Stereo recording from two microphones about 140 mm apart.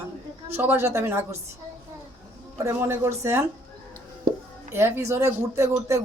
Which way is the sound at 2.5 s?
20° right (ahead or behind).